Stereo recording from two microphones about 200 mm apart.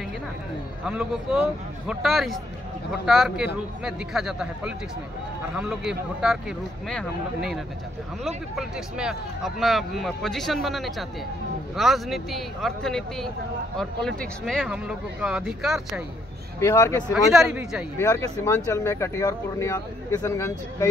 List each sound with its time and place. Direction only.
0.8 s speech: 5° right (ahead or behind)
8.5 s speech: 5° right (ahead or behind)
16.5 s speech: 15° left (ahead or behind)
17.3 s speech: centre (ahead or behind)
17.9 s speech: 15° left (ahead or behind)